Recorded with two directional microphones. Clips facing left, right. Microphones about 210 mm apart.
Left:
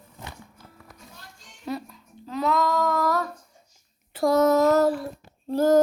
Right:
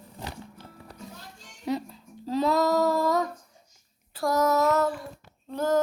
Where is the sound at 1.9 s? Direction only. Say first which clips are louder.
Right 5 dB; 30° right (ahead or behind).